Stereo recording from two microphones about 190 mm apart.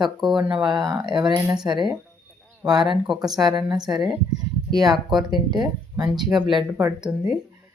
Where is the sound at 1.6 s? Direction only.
10° right (ahead or behind).